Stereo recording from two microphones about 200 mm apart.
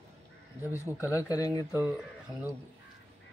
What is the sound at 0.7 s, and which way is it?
Speech, 15° left (ahead or behind).